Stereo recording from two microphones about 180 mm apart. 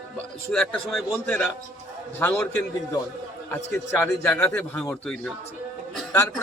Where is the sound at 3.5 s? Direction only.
10° left (ahead or behind).